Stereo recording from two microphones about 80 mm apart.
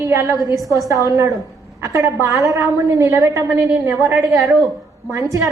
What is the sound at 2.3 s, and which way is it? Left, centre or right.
A woman's voice, right.